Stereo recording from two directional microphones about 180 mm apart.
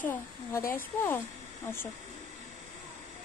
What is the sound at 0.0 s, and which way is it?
Speech, 10° left (ahead or behind).